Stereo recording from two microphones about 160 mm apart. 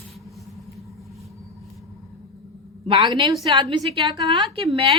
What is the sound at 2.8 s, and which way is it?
A woman's voice, 30° right (ahead or behind).